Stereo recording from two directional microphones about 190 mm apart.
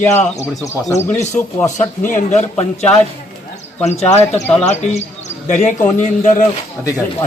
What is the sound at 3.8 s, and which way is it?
Speech, 35° left (ahead or behind).